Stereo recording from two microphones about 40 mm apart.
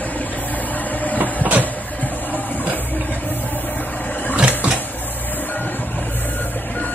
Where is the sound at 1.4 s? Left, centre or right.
Right.